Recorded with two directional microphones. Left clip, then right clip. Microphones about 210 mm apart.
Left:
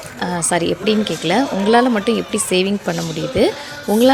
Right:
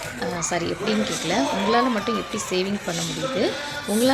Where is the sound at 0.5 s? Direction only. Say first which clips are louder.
Left 9 dB; 40° left (ahead or behind).